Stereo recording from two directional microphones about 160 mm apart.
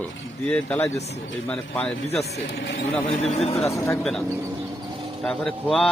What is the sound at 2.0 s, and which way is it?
Speech, 40° left (ahead or behind).